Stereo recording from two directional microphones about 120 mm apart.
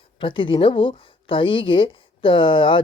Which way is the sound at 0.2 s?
45° left (ahead or behind).